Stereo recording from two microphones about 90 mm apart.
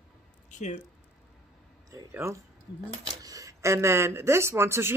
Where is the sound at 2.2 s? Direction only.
30° right (ahead or behind).